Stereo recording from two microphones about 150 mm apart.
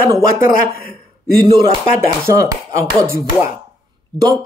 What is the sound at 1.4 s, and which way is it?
Speech, 30° right (ahead or behind).